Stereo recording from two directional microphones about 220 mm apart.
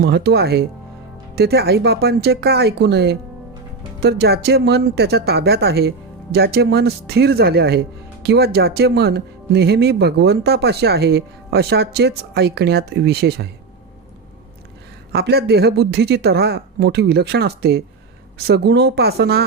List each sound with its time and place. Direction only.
0.0 s speech: 50° right (ahead or behind)
15.1 s speech: 45° right (ahead or behind)